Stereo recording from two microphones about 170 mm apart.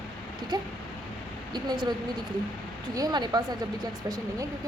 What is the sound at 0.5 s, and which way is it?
Speech, 25° right (ahead or behind).